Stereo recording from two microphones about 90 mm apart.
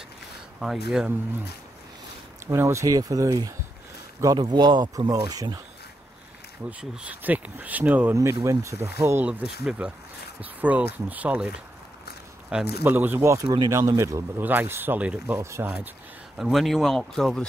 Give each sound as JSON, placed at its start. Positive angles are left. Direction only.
{"t": 0.6, "sound": "speech", "side_deg": -5}
{"t": 2.4, "sound": "a man's voice", "side_deg": -30}
{"t": 4.4, "sound": "speech", "side_deg": -55}
{"t": 6.8, "sound": "speech", "side_deg": -15}
{"t": 8.5, "sound": "a man's voice", "side_deg": -35}
{"t": 9.3, "sound": "speech", "side_deg": -15}
{"t": 12.8, "sound": "a man's voice", "side_deg": -20}
{"t": 14.4, "sound": "speech", "side_deg": -20}
{"t": 16.3, "sound": "speech", "side_deg": 0}